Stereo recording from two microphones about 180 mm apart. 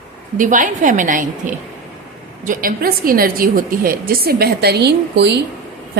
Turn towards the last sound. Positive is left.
turn(degrees=-70)  # may be behind; listen again after turning